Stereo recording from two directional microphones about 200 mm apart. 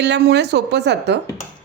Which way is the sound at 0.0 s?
60° right (ahead or behind).